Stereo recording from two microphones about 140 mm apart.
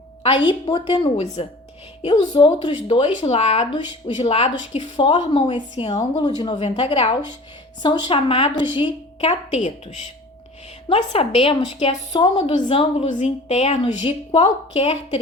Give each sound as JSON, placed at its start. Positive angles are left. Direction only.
{"t": 0.2, "sound": "a woman's voice", "side_deg": 40}
{"t": 1.1, "sound": "a woman's voice", "side_deg": 50}
{"t": 2.0, "sound": "a woman's voice", "side_deg": 40}
{"t": 6.6, "sound": "a woman's voice", "side_deg": 40}
{"t": 10.8, "sound": "a woman's voice", "side_deg": 45}
{"t": 13.1, "sound": "a woman's voice", "side_deg": 55}